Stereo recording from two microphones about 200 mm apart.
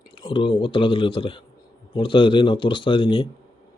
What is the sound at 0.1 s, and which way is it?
A man's voice, 25° left (ahead or behind).